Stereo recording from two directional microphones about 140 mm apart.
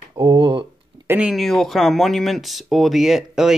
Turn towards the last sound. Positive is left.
turn(degrees=0)  # may be behind; listen again after turning